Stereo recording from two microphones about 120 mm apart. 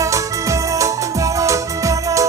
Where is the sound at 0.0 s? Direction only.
25° right (ahead or behind).